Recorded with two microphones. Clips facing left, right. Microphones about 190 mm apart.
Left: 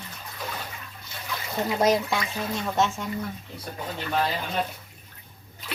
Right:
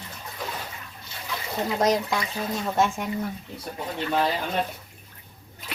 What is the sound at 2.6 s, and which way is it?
Speech, 10° right (ahead or behind).